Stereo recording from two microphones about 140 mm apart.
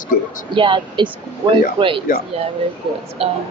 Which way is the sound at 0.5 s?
35° right (ahead or behind).